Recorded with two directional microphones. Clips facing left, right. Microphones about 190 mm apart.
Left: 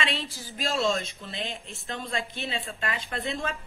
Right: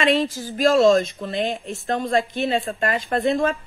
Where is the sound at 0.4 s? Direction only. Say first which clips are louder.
Right 11 dB; 50° right (ahead or behind).